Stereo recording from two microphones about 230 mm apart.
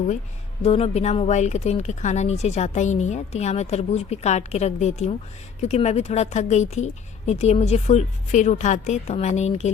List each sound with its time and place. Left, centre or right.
0.6 s speech: left